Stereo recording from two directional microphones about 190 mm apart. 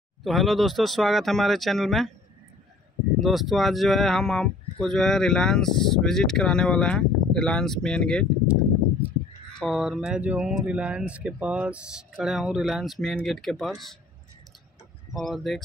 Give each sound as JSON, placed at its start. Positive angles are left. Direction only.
{"t": 0.2, "sound": "speech", "side_deg": 0}
{"t": 3.2, "sound": "speech", "side_deg": 0}
{"t": 9.6, "sound": "speech", "side_deg": 0}
{"t": 15.1, "sound": "speech", "side_deg": 0}